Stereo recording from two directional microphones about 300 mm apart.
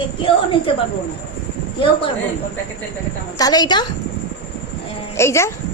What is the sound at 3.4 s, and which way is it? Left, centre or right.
Speech, centre.